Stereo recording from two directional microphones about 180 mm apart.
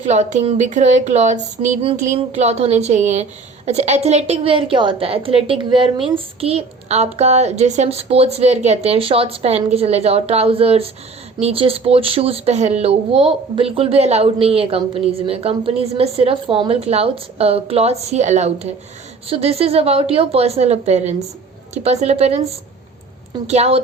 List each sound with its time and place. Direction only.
0.0 s speech: 40° right (ahead or behind)
23.5 s speech: 35° right (ahead or behind)